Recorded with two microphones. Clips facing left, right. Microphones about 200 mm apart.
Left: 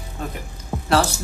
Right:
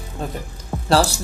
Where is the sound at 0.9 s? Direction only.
30° right (ahead or behind).